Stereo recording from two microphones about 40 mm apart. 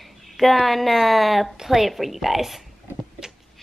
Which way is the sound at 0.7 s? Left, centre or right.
Centre.